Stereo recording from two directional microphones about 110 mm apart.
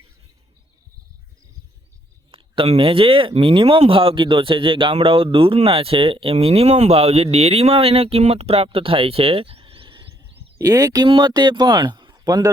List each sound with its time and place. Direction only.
2.3 s speech: 55° right (ahead or behind)
10.2 s a sound: 30° right (ahead or behind)
11.1 s speech: 45° right (ahead or behind)